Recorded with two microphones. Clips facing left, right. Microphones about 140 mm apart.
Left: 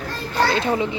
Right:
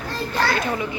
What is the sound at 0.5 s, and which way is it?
Speech, 25° left (ahead or behind).